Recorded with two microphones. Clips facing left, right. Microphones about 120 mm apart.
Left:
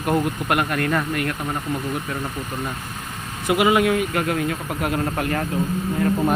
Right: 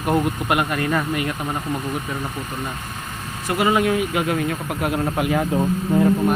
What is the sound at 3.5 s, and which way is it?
Speech, 5° left (ahead or behind).